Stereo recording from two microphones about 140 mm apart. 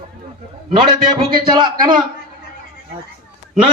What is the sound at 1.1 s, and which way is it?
Speech, 35° right (ahead or behind).